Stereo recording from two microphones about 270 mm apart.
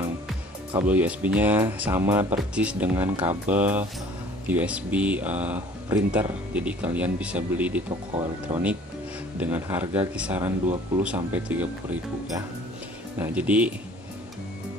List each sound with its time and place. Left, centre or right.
0.7 s speech: centre
8.2 s speech: right
9.4 s speech: centre